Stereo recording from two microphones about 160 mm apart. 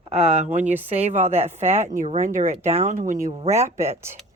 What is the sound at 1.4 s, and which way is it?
Speech, 45° right (ahead or behind).